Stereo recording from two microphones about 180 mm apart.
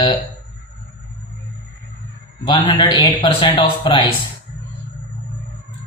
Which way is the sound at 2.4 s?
30° left (ahead or behind).